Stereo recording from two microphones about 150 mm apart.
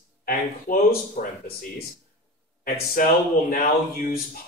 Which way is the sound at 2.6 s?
75° left (ahead or behind).